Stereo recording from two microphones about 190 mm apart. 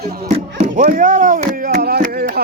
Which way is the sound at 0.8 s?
45° right (ahead or behind).